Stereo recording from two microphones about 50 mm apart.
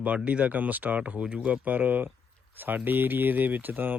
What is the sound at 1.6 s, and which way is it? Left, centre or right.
Speech, right.